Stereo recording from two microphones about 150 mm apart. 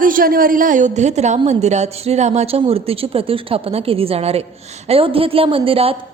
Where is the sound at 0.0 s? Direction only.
70° right (ahead or behind).